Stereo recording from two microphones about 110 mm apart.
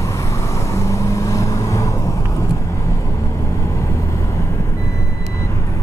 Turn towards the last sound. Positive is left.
turn(degrees=25)  # may be behind; listen again after turning